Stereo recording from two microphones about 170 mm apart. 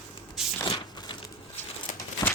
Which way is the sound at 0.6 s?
25° left (ahead or behind).